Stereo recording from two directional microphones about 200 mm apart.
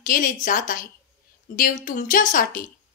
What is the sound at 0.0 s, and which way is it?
A woman's voice, 40° left (ahead or behind).